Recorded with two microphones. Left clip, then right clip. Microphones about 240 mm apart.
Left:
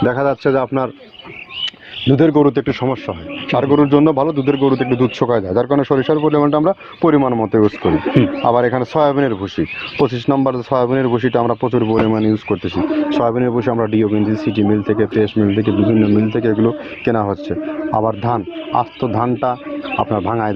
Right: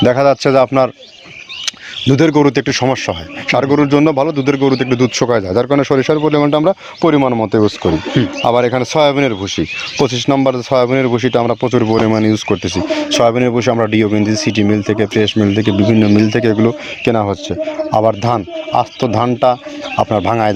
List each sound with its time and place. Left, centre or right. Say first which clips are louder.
0.0 s speech: right 5 dB; right